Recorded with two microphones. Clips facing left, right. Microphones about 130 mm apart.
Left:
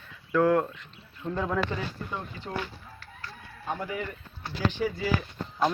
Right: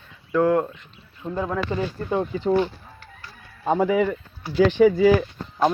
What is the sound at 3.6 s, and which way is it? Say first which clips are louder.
Speech: right 13 dB; 90° right.